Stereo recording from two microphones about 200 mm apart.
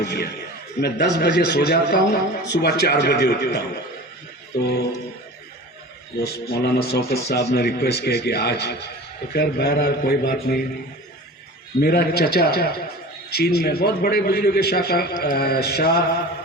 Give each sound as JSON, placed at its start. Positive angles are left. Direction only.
{"t": 0.0, "sound": "a man's voice", "side_deg": 55}
{"t": 6.1, "sound": "a man's voice", "side_deg": 50}
{"t": 11.8, "sound": "a man's voice", "side_deg": 50}